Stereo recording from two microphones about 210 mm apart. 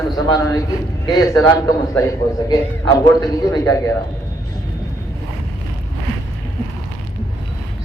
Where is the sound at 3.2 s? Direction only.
15° left (ahead or behind).